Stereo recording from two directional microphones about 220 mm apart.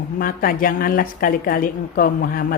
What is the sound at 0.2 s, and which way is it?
A woman's voice, 40° left (ahead or behind).